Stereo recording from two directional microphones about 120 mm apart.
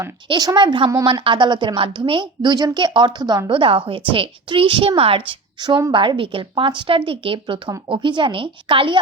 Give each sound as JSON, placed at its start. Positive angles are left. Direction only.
{"t": 0.3, "sound": "a woman's voice", "side_deg": -35}
{"t": 5.6, "sound": "a woman's voice", "side_deg": -40}